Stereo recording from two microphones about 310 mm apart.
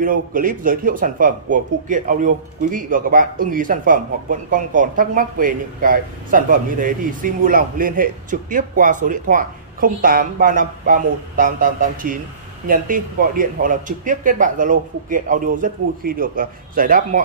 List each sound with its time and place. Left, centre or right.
0.0 s speech: right